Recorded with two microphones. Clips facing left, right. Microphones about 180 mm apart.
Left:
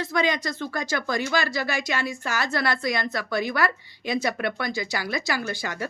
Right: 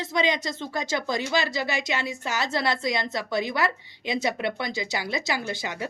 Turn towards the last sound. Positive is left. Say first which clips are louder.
# left 1 dB
turn(degrees=-20)  # may be behind; listen again after turning